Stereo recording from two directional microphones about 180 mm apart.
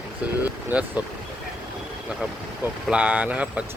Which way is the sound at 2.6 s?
5° right (ahead or behind).